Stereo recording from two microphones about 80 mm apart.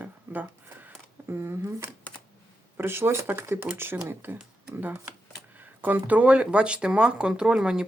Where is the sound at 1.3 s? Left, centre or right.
Right.